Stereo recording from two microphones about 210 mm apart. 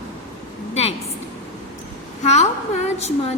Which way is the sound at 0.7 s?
30° left (ahead or behind).